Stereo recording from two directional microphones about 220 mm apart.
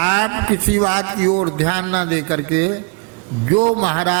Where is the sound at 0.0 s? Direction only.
15° right (ahead or behind).